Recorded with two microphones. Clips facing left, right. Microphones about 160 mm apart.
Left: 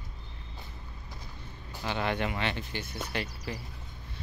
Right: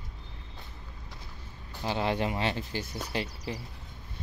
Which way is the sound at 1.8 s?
30° right (ahead or behind).